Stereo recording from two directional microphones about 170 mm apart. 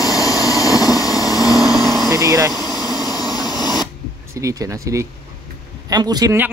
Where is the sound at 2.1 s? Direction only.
20° right (ahead or behind).